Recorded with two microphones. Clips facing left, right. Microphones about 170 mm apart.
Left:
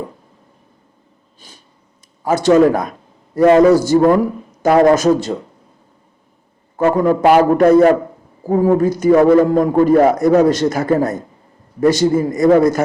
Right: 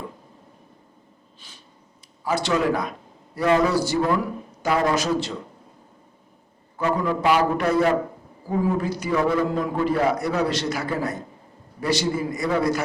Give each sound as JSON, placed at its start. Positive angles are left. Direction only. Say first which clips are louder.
{"t": 1.4, "sound": "a sound", "louder": "left 6 dB", "side_deg": 40}
{"t": 2.2, "sound": "a man's voice", "louder": "left 11 dB", "side_deg": 45}
{"t": 6.7, "sound": "a man's voice", "louder": "left 9 dB", "side_deg": 45}